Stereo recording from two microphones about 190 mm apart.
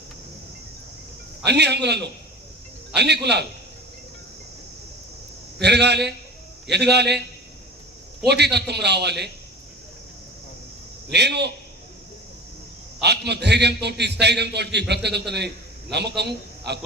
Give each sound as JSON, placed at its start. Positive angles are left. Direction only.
{"t": 1.5, "sound": "a man's voice", "side_deg": -60}
{"t": 5.5, "sound": "a man's voice", "side_deg": -60}
{"t": 8.3, "sound": "a man's voice", "side_deg": -60}
{"t": 11.1, "sound": "a man's voice", "side_deg": -60}
{"t": 13.0, "sound": "a man's voice", "side_deg": -60}